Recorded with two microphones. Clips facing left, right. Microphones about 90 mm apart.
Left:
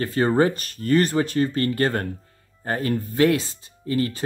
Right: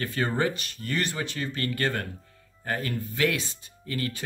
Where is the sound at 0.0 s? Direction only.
35° left (ahead or behind).